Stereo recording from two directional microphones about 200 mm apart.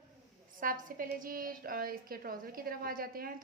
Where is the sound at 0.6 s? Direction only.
45° right (ahead or behind).